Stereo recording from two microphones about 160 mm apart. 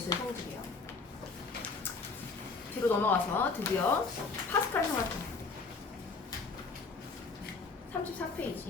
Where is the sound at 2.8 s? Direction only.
10° left (ahead or behind).